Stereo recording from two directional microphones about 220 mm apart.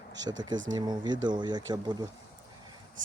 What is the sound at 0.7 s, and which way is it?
Speech, 20° right (ahead or behind).